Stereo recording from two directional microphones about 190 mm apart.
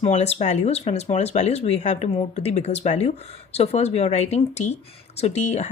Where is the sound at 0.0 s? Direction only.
35° left (ahead or behind).